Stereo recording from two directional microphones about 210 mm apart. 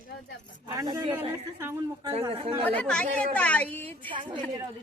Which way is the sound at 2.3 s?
25° right (ahead or behind).